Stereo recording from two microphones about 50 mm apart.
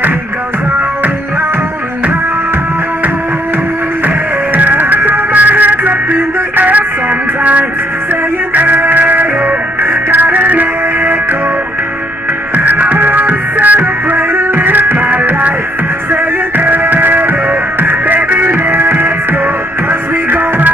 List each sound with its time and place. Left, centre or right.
4.6 s music: right
8.5 s music: right
12.5 s music: right